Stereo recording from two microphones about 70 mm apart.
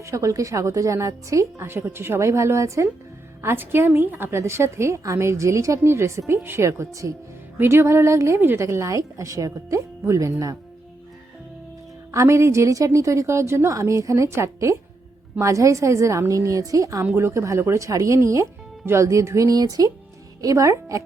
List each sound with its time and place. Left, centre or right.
0.0 s a woman's voice: right
1.6 s a woman's voice: right
3.4 s a woman's voice: right
7.6 s a woman's voice: right
12.1 s a woman's voice: right
17.2 s a woman's voice: right
19.5 s a woman's voice: right